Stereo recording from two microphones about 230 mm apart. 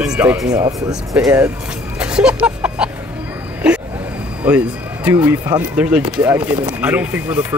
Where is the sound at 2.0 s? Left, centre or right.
Centre.